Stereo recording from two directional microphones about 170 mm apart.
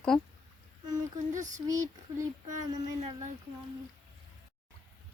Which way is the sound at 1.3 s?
45° right (ahead or behind).